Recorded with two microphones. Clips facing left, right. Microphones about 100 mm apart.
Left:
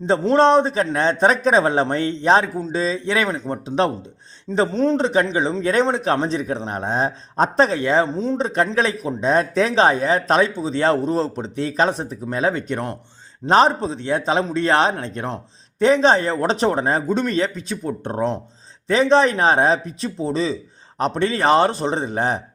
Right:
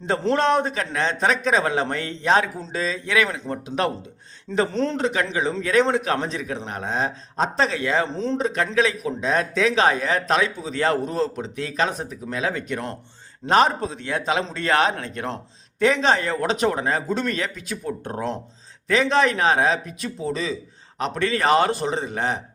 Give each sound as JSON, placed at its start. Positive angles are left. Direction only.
{"t": 0.0, "sound": "a man's voice", "side_deg": 20}
{"t": 4.9, "sound": "a man's voice", "side_deg": 30}
{"t": 8.0, "sound": "speech", "side_deg": 15}
{"t": 8.4, "sound": "a man's voice", "side_deg": 30}
{"t": 17.1, "sound": "a man's voice", "side_deg": 20}